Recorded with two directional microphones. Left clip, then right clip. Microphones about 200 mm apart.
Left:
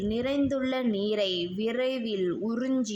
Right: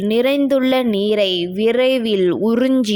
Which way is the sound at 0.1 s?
40° right (ahead or behind).